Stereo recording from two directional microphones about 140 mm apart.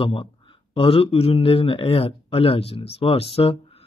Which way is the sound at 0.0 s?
40° left (ahead or behind).